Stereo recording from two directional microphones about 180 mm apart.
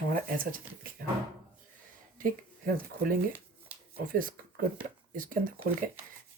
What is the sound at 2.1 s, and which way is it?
Speech, 50° right (ahead or behind).